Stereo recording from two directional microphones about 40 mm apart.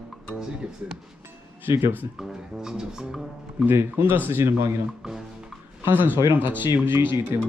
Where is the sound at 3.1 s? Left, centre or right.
Centre.